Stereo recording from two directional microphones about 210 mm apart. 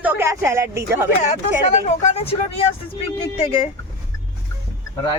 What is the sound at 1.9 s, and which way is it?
Speech, 30° left (ahead or behind).